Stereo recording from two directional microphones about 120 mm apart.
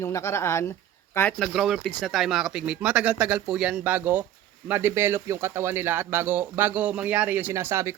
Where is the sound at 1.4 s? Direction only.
Centre (ahead or behind).